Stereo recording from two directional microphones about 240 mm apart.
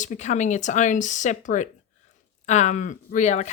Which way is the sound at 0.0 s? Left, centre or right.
Left.